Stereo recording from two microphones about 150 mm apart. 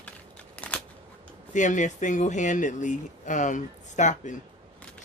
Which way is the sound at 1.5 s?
55° left (ahead or behind).